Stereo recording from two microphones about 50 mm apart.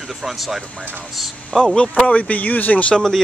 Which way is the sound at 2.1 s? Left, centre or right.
Left.